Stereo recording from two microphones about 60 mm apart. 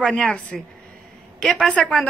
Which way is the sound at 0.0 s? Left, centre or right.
Centre.